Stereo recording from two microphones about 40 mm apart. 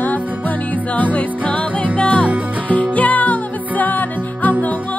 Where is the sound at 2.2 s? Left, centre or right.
Right.